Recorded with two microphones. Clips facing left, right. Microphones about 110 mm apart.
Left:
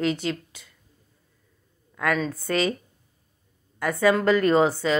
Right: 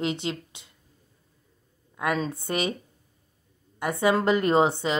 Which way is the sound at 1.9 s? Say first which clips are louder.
Left 2 dB; 20° right (ahead or behind).